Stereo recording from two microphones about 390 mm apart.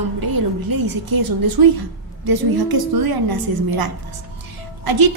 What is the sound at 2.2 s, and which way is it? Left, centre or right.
A woman's voice, right.